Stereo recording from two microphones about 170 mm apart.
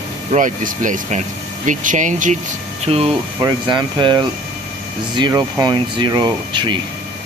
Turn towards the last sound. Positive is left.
turn(degrees=-25)  # may be behind; listen again after turning